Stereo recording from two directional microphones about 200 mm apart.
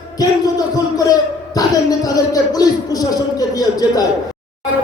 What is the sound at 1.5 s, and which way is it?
Speech, 20° left (ahead or behind).